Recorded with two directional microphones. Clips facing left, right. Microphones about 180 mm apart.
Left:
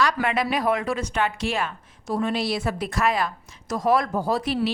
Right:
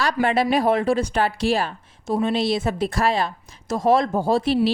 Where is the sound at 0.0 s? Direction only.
30° right (ahead or behind).